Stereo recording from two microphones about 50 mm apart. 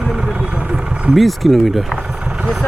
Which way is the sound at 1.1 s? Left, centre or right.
Centre.